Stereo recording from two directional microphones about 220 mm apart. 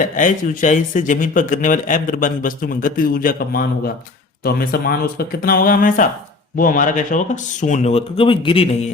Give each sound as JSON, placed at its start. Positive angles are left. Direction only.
{"t": 0.0, "sound": "a man's voice", "side_deg": 35}